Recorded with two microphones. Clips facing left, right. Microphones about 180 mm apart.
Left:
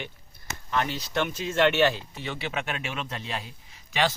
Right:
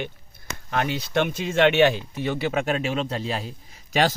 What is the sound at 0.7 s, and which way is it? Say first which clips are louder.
Speech: right 4 dB; 60° right (ahead or behind).